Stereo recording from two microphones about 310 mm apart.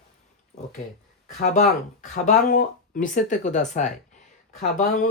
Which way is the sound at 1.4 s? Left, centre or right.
Left.